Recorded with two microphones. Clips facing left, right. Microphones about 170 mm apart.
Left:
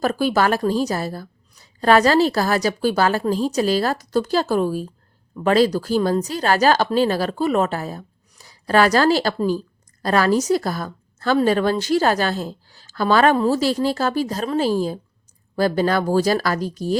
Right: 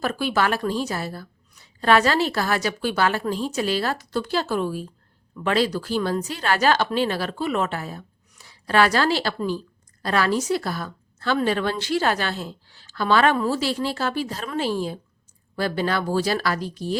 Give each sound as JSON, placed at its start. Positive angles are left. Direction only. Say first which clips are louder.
{"t": 0.0, "sound": "a woman's voice", "louder": "left 4 dB", "side_deg": 40}